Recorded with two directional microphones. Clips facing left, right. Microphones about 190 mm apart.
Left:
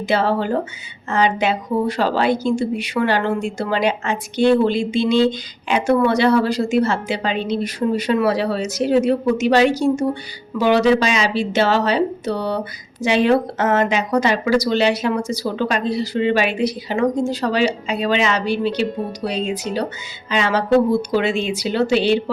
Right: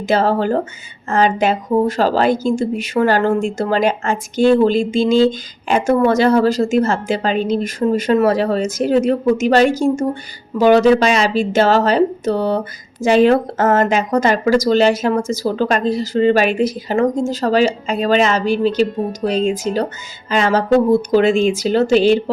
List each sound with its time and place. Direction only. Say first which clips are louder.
0.1 s a woman's voice: right 3 dB; 45° right (ahead or behind)